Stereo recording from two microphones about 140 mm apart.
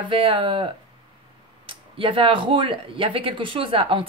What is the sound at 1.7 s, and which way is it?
Speech, 40° right (ahead or behind).